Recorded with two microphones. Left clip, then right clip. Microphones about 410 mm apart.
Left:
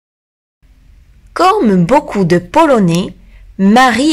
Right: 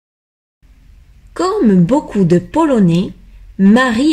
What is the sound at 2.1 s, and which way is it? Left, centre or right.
A woman's voice, centre.